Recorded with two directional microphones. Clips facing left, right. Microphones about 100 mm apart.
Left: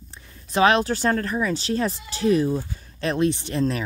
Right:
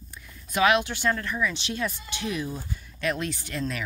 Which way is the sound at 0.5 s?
35° left (ahead or behind).